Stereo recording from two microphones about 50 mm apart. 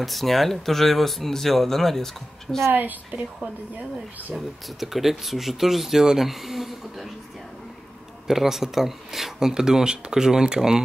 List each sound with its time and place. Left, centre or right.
0.0 s speech: centre
2.7 s a woman's voice: right
4.4 s speech: centre
8.3 s speech: centre